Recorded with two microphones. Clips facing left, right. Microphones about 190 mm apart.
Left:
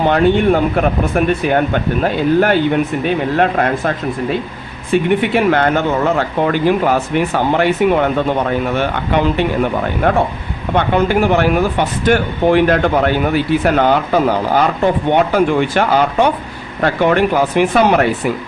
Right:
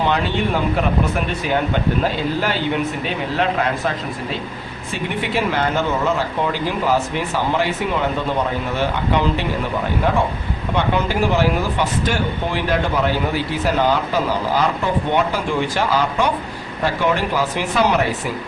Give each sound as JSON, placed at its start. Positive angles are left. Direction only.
{"t": 0.0, "sound": "speech", "side_deg": 50}
{"t": 10.8, "sound": "speech", "side_deg": 60}